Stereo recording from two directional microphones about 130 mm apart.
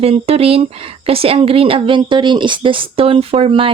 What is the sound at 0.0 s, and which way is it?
A woman's voice, 50° right (ahead or behind).